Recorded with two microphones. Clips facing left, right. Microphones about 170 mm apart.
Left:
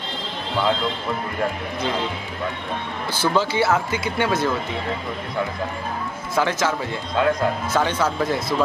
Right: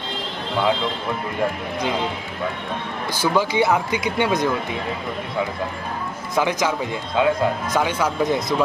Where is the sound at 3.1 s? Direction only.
10° right (ahead or behind).